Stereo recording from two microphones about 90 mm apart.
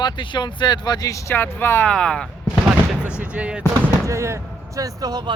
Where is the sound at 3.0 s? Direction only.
25° left (ahead or behind).